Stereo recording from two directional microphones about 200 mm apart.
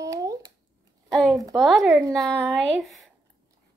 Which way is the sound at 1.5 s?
Centre (ahead or behind).